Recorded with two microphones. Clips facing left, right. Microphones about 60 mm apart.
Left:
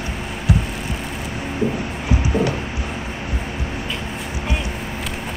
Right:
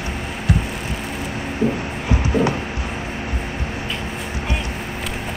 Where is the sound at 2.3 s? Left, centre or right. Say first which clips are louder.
Right 2 dB; right.